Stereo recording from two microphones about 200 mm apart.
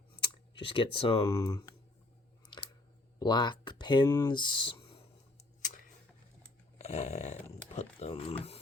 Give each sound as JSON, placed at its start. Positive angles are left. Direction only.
{"t": 0.6, "sound": "speech", "side_deg": 25}
{"t": 3.2, "sound": "speech", "side_deg": 20}
{"t": 5.6, "sound": "a sound", "side_deg": 40}
{"t": 6.7, "sound": "dog", "side_deg": 35}
{"t": 7.7, "sound": "speech", "side_deg": 30}